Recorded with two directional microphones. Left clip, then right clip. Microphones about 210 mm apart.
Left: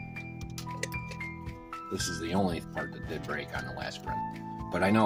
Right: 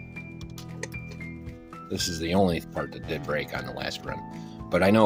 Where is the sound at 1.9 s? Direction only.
45° right (ahead or behind).